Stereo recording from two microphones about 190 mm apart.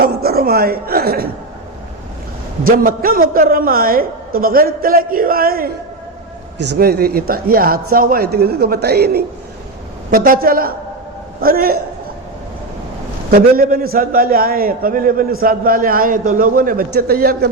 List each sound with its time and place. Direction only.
0.0 s a woman's voice: 55° right (ahead or behind)
2.6 s a man's voice: 50° right (ahead or behind)
13.3 s a man's voice: 50° right (ahead or behind)